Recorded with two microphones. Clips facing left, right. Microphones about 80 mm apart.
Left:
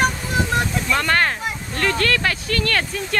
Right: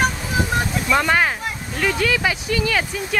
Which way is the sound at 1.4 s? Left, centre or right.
Centre.